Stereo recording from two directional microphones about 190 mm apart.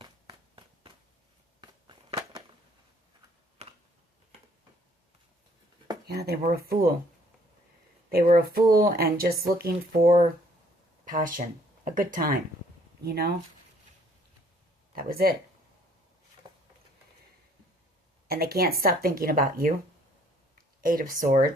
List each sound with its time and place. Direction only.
0.0 s a sound: 25° right (ahead or behind)
3.6 s a sound: 35° right (ahead or behind)
6.1 s speech: 55° right (ahead or behind)
8.1 s speech: 55° right (ahead or behind)
14.9 s speech: 50° right (ahead or behind)
18.3 s speech: 55° right (ahead or behind)
20.8 s speech: 50° right (ahead or behind)